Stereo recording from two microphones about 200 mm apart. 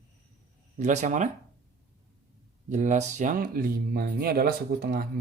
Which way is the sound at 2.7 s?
35° right (ahead or behind).